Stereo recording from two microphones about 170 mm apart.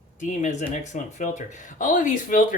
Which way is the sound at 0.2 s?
45° left (ahead or behind).